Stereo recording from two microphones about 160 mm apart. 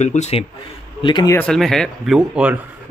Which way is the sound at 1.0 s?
25° left (ahead or behind).